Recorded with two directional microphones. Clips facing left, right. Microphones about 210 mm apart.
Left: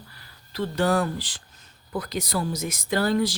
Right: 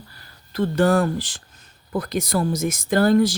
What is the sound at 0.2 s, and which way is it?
Speech, 50° right (ahead or behind).